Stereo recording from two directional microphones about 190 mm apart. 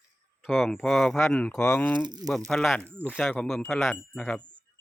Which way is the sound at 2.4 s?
Centre (ahead or behind).